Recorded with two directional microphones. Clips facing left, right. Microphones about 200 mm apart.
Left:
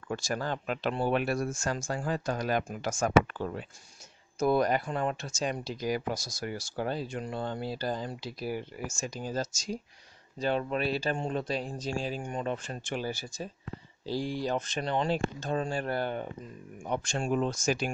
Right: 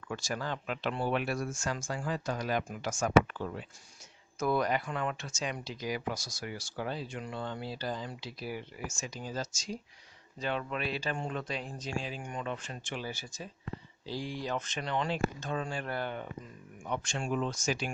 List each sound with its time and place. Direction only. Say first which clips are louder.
0.1 s speech: left 4 dB; 45° left (ahead or behind)